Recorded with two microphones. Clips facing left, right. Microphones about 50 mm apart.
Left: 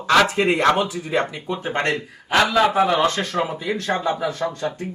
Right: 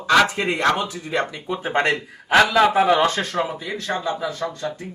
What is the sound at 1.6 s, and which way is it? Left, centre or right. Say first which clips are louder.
A man's voice: right 3 dB; centre.